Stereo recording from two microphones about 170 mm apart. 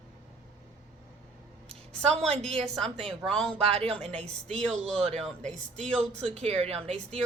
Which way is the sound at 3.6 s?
35° right (ahead or behind).